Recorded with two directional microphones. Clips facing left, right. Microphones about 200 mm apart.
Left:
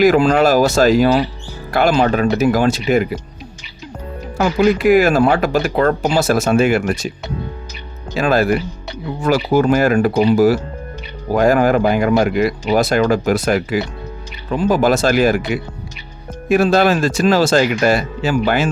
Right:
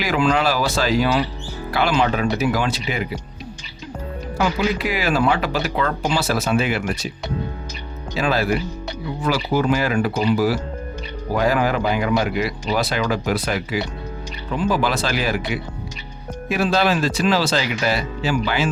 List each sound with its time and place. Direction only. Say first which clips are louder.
0.0 s speech: left 8 dB; 45° left (ahead or behind)
4.4 s speech: left 7 dB; 45° left (ahead or behind)
8.1 s speech: left 5 dB; 50° left (ahead or behind)